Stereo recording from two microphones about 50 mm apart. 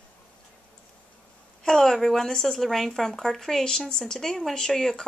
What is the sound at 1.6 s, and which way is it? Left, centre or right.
Speech, centre.